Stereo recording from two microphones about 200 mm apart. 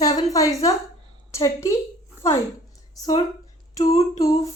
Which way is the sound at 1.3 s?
15° left (ahead or behind).